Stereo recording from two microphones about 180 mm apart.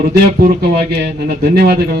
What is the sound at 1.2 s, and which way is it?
Speech, 60° right (ahead or behind).